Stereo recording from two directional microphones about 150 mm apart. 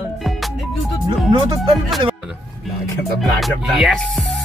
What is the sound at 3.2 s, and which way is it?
Music, centre (ahead or behind).